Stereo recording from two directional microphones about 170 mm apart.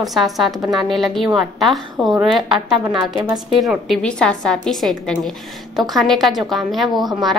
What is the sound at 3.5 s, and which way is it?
A woman's voice, centre (ahead or behind).